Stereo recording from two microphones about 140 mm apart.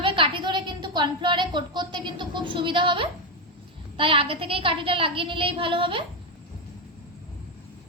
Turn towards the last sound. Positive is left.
turn(degrees=-40)  # may be behind; listen again after turning